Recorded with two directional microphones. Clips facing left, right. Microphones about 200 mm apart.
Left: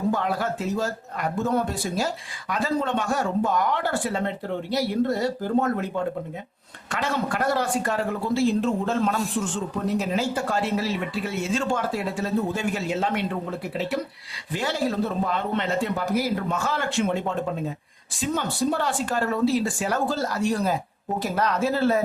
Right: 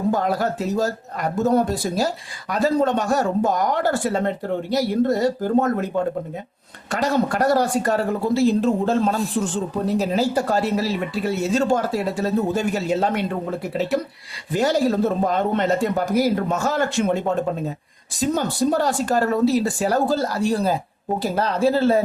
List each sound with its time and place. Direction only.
0.1 s a man's voice: 40° right (ahead or behind)